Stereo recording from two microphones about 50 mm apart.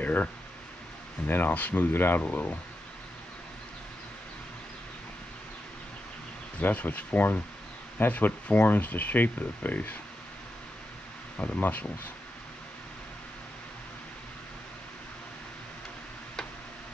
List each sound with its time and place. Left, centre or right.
0.0 s speech: left
2.2 s speech: left
6.6 s speech: left
11.3 s speech: left